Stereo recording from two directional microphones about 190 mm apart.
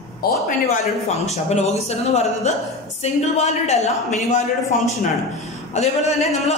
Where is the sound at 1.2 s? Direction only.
35° left (ahead or behind).